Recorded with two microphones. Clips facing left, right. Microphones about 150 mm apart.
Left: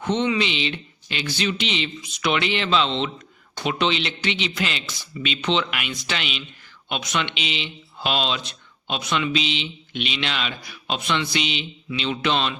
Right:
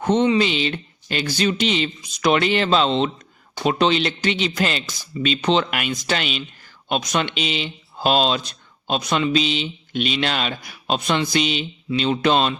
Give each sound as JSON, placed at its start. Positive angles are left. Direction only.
{"t": 0.0, "sound": "speech", "side_deg": -40}